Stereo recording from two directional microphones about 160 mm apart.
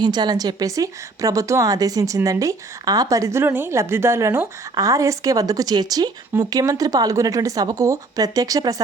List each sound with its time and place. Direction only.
0.0 s a woman's voice: 25° right (ahead or behind)